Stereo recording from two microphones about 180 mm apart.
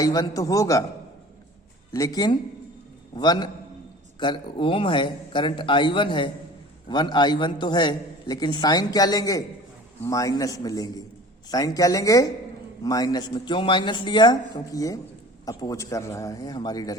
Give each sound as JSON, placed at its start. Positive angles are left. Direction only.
{"t": 0.0, "sound": "a man's voice", "side_deg": 20}
{"t": 1.9, "sound": "a man's voice", "side_deg": 20}